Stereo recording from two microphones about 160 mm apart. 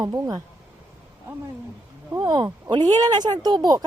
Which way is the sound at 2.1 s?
25° right (ahead or behind).